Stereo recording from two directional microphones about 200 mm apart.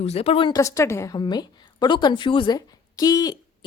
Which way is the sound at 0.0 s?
30° left (ahead or behind).